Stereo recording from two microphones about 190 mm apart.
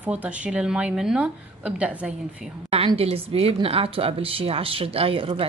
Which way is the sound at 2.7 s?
30° right (ahead or behind).